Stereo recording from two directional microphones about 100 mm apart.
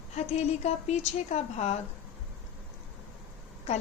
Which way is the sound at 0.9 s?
90° left.